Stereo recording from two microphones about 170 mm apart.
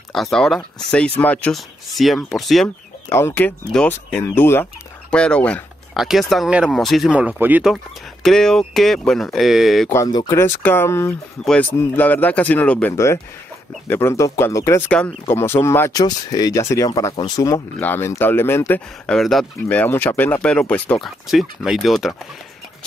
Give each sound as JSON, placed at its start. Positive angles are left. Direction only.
{"t": 0.1, "sound": "speech", "side_deg": 0}
{"t": 3.2, "sound": "speech", "side_deg": 10}
{"t": 7.7, "sound": "speech", "side_deg": 0}
{"t": 9.8, "sound": "speech", "side_deg": 20}
{"t": 14.9, "sound": "speech", "side_deg": 5}